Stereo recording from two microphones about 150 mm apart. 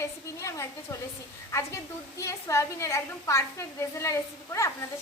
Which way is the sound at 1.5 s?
20° left (ahead or behind).